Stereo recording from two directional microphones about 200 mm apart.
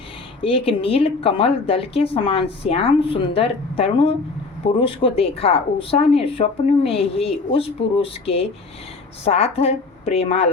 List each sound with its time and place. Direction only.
0.4 s a woman's voice: 30° left (ahead or behind)